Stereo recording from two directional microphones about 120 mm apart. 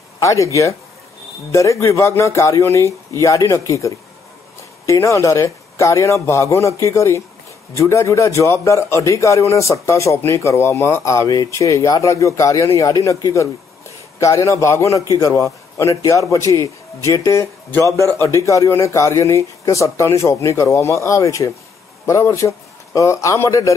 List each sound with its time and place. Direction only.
0.2 s speech: 25° left (ahead or behind)
1.5 s a man's voice: 25° left (ahead or behind)